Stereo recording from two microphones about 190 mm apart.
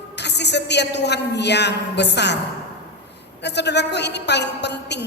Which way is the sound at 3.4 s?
65° left (ahead or behind).